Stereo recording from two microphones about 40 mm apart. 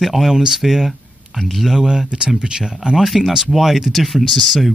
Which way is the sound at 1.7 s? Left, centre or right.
Centre.